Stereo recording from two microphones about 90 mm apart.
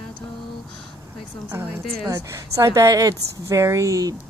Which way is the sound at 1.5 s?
20° right (ahead or behind).